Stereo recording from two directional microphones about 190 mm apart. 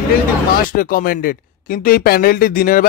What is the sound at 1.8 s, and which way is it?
Speech, 50° left (ahead or behind).